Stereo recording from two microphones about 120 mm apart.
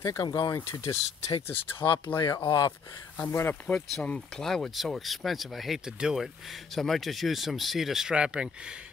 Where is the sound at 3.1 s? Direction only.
15° left (ahead or behind).